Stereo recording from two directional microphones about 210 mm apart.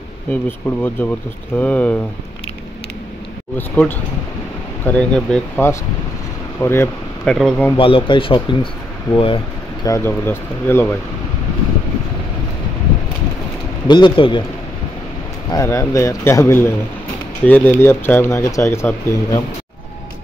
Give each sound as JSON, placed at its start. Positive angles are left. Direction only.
{"t": 0.3, "sound": "speech", "side_deg": 10}
{"t": 3.5, "sound": "speech", "side_deg": 10}
{"t": 7.7, "sound": "speech", "side_deg": 25}
{"t": 9.8, "sound": "speech", "side_deg": 10}
{"t": 13.8, "sound": "speech", "side_deg": 20}
{"t": 15.5, "sound": "speech", "side_deg": 15}